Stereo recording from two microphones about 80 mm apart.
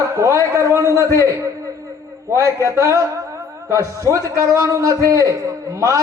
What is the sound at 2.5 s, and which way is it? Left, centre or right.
A man's voice, right.